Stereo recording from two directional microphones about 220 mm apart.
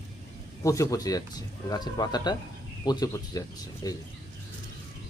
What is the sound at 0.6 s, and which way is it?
Speech, 15° left (ahead or behind).